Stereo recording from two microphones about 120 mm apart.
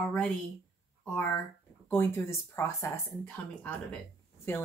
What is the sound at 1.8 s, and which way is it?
Speech, 20° left (ahead or behind).